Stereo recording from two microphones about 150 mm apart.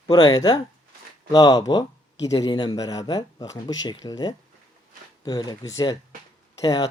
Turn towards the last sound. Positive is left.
turn(degrees=25)  # may be behind; listen again after turning